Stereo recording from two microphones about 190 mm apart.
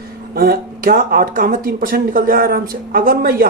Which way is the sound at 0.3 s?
50° right (ahead or behind).